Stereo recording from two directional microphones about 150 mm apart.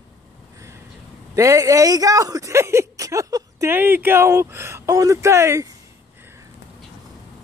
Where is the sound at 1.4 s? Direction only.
20° right (ahead or behind).